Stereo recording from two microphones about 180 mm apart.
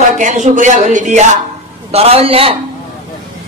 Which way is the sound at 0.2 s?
45° right (ahead or behind).